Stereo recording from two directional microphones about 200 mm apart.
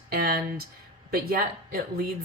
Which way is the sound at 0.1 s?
50° right (ahead or behind).